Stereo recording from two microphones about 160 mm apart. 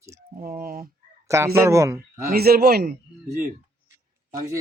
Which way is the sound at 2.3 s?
75° right (ahead or behind).